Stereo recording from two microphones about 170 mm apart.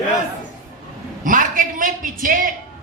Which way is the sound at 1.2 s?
55° right (ahead or behind).